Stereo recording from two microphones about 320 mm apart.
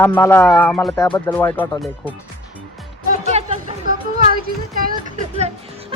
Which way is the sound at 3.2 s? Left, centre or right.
Centre.